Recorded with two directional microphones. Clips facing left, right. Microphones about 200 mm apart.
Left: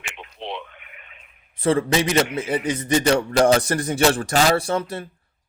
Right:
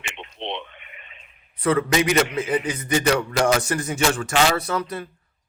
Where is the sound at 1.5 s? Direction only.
30° left (ahead or behind).